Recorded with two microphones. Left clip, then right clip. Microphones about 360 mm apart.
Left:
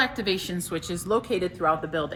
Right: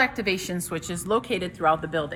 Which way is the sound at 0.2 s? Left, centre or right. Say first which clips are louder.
Right 1 dB; centre.